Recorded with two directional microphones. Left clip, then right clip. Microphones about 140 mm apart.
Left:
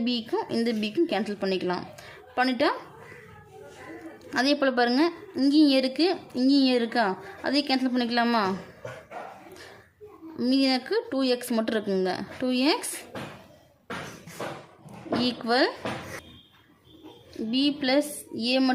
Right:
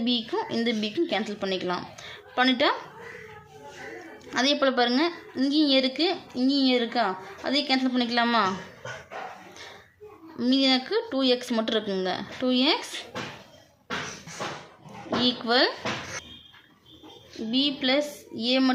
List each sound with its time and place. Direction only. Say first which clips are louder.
0.0 s a woman's voice: right 1 dB; 25° left (ahead or behind)
4.3 s a woman's voice: right 1 dB; 30° left (ahead or behind)
10.3 s a woman's voice: right 2 dB; 25° left (ahead or behind)
15.1 s a woman's voice: right 2 dB; 30° left (ahead or behind)
17.5 s a woman's voice: even; 30° left (ahead or behind)